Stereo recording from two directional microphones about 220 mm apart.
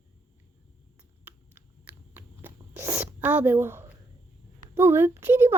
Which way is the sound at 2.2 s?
10° right (ahead or behind).